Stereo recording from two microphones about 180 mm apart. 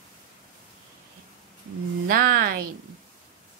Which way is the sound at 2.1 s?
50° right (ahead or behind).